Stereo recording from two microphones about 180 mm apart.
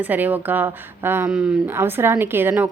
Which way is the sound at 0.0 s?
10° right (ahead or behind).